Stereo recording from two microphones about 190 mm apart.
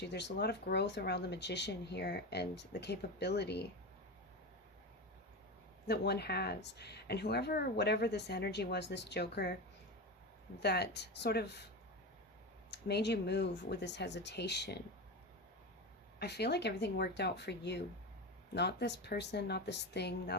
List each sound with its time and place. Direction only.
0.0 s speech: 65° left (ahead or behind)
5.9 s speech: 60° left (ahead or behind)
10.6 s speech: 60° left (ahead or behind)
12.7 s speech: 65° left (ahead or behind)
16.1 s speech: 60° left (ahead or behind)